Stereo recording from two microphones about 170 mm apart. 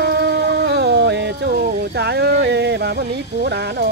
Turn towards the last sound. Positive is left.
turn(degrees=-75)  # may be behind; listen again after turning